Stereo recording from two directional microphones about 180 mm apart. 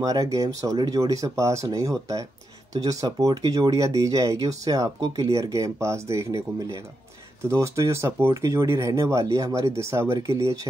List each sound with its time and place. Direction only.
0.0 s speech: 20° right (ahead or behind)